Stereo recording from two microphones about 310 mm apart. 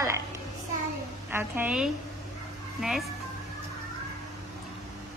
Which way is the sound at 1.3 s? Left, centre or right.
Centre.